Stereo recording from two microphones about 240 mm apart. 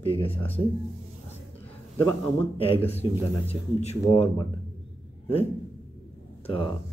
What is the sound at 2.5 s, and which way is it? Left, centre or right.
Speech, left.